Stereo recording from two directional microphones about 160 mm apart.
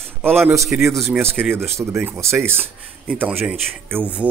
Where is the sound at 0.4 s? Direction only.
15° right (ahead or behind).